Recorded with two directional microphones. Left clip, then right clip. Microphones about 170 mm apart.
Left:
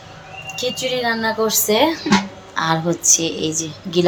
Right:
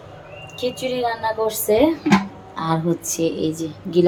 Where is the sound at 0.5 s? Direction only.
10° left (ahead or behind).